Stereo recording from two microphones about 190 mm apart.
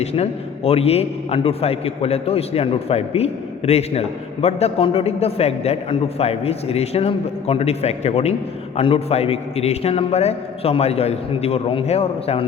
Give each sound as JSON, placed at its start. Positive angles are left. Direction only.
{"t": 0.0, "sound": "a man's voice", "side_deg": 35}